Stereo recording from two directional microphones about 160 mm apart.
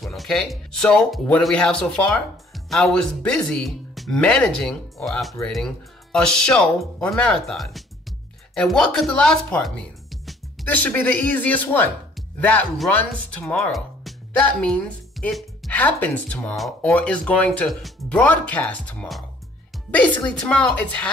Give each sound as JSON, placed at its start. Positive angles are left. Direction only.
{"t": 0.0, "sound": "a woman's voice", "side_deg": 0}